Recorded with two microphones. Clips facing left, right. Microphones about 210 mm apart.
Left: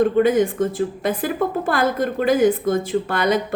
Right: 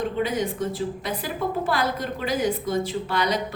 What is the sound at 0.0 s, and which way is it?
A woman's voice, 50° left (ahead or behind).